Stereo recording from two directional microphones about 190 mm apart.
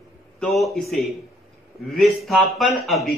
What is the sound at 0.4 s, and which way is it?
Speech, centre (ahead or behind).